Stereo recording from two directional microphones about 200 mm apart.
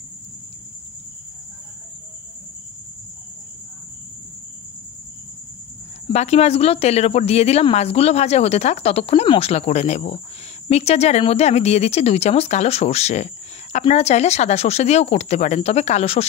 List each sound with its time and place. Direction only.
6.1 s speech: 30° left (ahead or behind)